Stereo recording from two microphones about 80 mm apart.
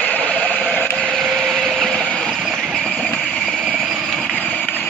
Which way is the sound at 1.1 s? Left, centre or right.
Centre.